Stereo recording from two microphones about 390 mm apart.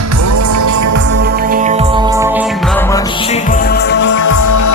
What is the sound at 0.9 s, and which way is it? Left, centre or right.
Music, right.